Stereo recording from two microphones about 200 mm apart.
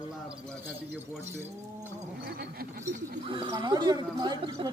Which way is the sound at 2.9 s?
30° right (ahead or behind).